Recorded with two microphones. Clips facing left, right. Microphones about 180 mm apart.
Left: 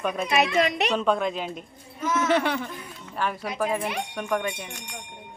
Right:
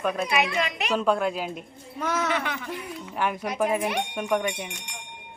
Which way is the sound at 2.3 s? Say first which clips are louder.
Left 6 dB; 35° left (ahead or behind).